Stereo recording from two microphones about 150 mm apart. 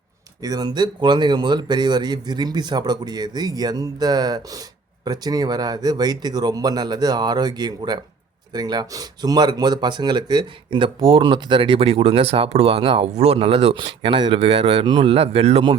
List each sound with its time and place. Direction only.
0.4 s speech: 25° right (ahead or behind); by 15.7 s 45° right (ahead or behind)